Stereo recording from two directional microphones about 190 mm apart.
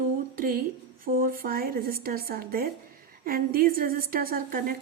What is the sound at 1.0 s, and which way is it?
Speech, 50° right (ahead or behind).